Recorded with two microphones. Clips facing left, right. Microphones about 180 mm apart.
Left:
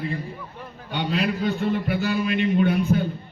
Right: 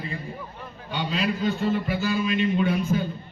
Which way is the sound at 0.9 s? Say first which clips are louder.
Left 2 dB; 60° left (ahead or behind).